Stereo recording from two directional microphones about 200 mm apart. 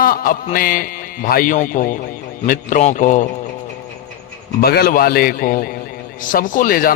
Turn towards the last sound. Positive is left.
turn(degrees=45)  # may be behind; listen again after turning